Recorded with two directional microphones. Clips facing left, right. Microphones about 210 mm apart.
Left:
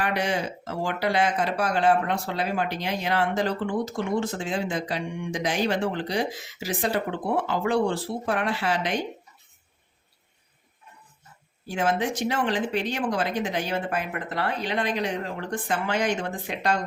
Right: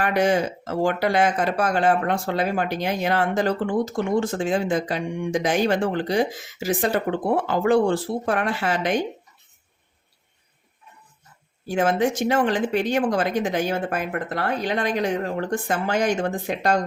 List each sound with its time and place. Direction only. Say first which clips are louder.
0.0 s speech: right 6 dB; 45° right (ahead or behind)
11.7 s speech: right 5 dB; 50° right (ahead or behind)